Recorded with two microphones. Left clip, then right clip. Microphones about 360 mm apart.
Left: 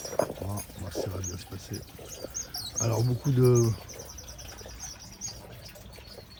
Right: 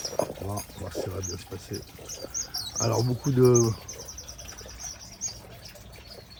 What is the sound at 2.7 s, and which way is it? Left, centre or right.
Speech, right.